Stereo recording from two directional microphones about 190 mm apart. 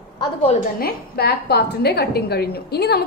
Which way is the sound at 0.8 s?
55° left (ahead or behind).